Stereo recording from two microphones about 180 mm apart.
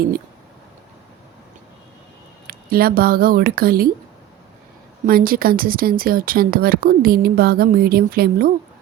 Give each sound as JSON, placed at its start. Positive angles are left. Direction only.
{"t": 2.5, "sound": "speech", "side_deg": -55}
{"t": 5.0, "sound": "speech", "side_deg": -55}